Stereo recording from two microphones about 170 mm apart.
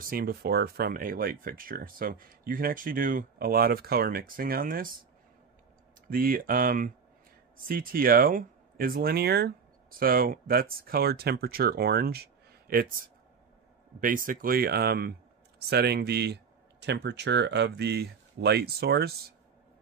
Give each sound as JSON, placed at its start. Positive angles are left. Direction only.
{"t": 0.0, "sound": "speech", "side_deg": -60}
{"t": 6.0, "sound": "speech", "side_deg": -60}
{"t": 16.8, "sound": "speech", "side_deg": -85}